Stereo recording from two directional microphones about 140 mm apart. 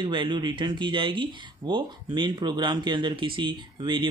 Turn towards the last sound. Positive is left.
turn(degrees=-35)  # may be behind; listen again after turning